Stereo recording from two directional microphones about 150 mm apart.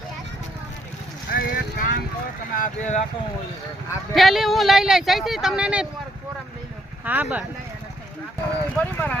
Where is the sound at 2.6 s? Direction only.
50° left (ahead or behind).